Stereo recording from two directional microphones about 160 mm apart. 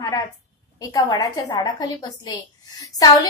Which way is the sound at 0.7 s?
25° left (ahead or behind).